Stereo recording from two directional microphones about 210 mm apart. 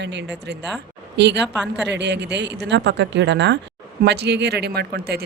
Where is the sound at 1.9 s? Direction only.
55° right (ahead or behind).